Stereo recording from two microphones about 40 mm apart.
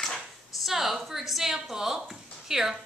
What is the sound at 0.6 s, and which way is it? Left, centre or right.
A woman's voice, centre.